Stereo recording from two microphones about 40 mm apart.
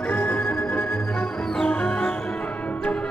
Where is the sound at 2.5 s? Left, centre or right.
Left.